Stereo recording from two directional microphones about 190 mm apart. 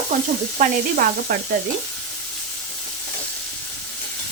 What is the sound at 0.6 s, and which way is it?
Sizzle, 50° right (ahead or behind).